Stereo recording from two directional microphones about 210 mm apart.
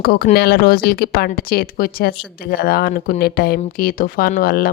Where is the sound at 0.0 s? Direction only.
45° left (ahead or behind).